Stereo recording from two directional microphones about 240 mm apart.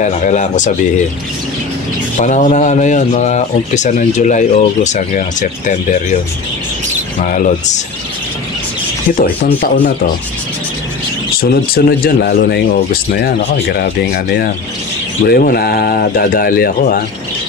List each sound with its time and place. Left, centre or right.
0.0 s speech: left
2.1 s speech: left
7.2 s speech: left
9.2 s speech: left
11.3 s speech: left